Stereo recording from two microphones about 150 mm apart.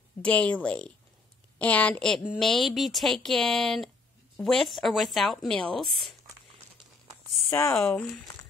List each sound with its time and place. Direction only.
0.2 s a woman's voice: 10° left (ahead or behind)
7.4 s speech: 20° left (ahead or behind)
7.7 s speech: centre (ahead or behind)